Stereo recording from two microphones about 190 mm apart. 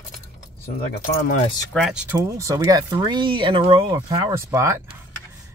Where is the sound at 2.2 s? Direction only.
15° right (ahead or behind).